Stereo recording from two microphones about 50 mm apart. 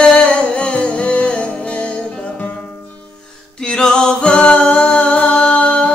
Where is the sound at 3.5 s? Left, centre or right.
Centre.